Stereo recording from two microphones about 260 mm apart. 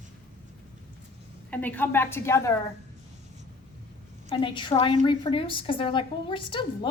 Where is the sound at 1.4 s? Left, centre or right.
Centre.